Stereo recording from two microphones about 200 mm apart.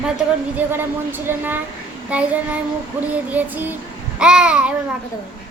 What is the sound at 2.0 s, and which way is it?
Child singing, 5° right (ahead or behind).